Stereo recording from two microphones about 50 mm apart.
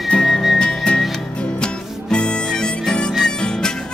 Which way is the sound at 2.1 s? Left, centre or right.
Centre.